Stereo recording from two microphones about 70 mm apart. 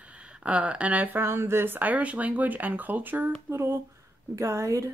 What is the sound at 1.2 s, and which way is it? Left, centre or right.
Speech, right.